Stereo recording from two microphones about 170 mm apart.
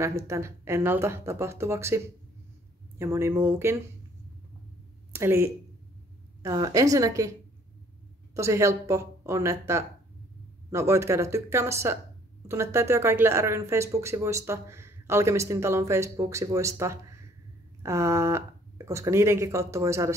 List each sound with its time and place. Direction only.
0.0 s speech: 15° right (ahead or behind)
5.1 s a woman's voice: 15° right (ahead or behind)
8.4 s speech: 15° right (ahead or behind)